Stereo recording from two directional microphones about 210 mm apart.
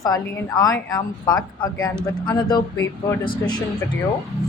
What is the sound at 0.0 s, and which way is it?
A woman's voice, 15° left (ahead or behind).